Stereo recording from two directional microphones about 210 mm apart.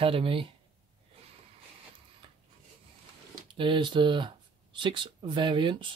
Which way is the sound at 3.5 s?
25° right (ahead or behind).